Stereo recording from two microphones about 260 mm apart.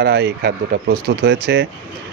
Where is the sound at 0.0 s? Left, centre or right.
Right.